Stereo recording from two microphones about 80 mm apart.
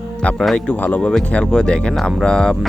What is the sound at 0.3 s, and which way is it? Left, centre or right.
Speech, centre.